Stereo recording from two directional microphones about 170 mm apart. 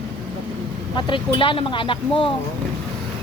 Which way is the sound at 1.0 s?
30° left (ahead or behind).